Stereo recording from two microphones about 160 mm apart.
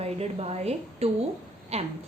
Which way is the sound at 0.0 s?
40° right (ahead or behind).